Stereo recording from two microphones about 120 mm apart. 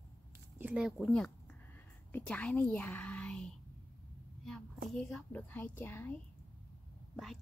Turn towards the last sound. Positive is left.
turn(degrees=0)  # may be behind; listen again after turning